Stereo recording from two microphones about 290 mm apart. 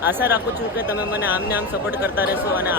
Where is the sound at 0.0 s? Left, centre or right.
Centre.